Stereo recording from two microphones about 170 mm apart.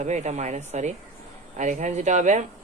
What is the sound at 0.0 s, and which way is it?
A woman's voice, 45° right (ahead or behind).